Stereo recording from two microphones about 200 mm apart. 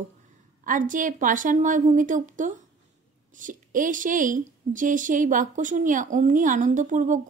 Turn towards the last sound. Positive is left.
turn(degrees=-40)  # may be behind; listen again after turning